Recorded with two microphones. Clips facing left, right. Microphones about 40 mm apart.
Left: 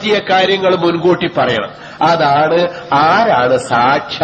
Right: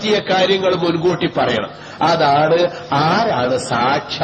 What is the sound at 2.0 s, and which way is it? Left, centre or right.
Speech, centre.